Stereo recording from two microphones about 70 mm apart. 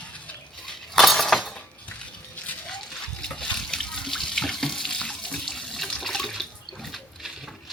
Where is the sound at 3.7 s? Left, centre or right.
Centre.